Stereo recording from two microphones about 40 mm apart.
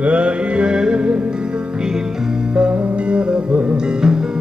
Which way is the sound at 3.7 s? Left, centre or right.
Right.